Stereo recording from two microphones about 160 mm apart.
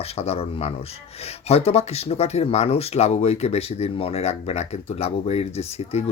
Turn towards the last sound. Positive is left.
turn(degrees=40)  # may be behind; listen again after turning